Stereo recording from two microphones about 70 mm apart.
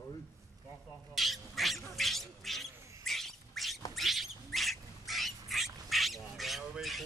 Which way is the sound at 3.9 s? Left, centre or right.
Centre.